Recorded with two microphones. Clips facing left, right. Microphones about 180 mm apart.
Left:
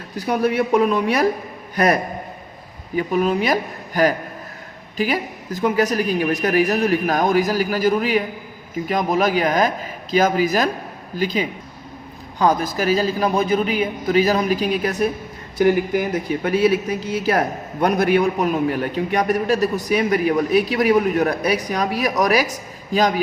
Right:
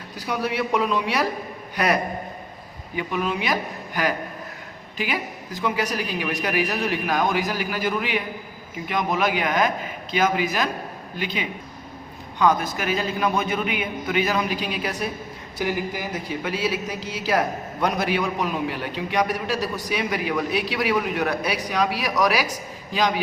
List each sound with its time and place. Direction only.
0.3 s a man's voice: 50° left (ahead or behind)